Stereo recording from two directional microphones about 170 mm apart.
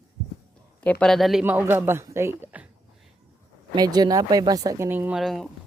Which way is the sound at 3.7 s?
25° right (ahead or behind).